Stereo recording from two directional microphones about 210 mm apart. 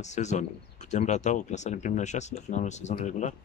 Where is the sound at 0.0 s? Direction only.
35° left (ahead or behind).